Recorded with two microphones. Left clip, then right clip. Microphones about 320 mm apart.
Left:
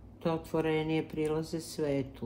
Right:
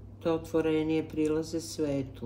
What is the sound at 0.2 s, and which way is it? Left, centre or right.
Speech, centre.